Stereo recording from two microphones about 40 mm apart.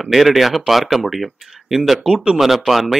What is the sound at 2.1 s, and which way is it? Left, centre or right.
Speech, centre.